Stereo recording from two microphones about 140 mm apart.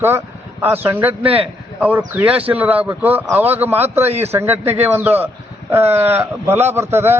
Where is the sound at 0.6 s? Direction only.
15° right (ahead or behind).